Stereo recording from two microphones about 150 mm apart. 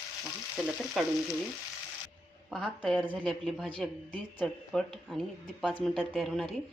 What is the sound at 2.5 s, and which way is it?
Speech, 5° left (ahead or behind).